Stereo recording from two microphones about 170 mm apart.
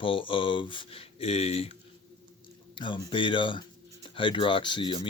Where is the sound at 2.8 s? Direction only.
30° left (ahead or behind).